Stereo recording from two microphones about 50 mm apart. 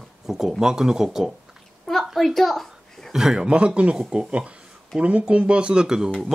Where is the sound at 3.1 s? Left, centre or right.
Centre.